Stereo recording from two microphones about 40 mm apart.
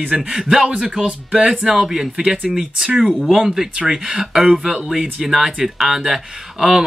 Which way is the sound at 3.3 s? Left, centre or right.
Centre.